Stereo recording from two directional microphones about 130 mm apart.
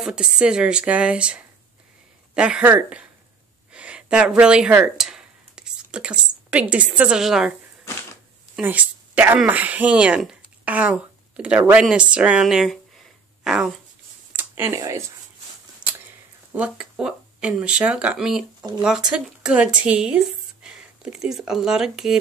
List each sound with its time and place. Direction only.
0.0 s speech: 5° right (ahead or behind)
8.5 s speech: 10° right (ahead or behind)
14.3 s a sound: 15° right (ahead or behind)
14.7 s speech: 25° right (ahead or behind)
16.5 s speech: 10° right (ahead or behind)